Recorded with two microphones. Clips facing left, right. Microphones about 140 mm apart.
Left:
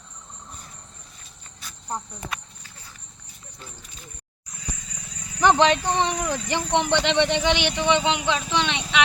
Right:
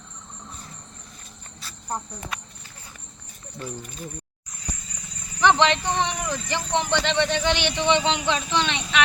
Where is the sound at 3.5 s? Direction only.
55° right (ahead or behind).